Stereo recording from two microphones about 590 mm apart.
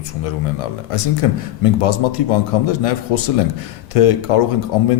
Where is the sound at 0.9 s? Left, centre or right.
Left.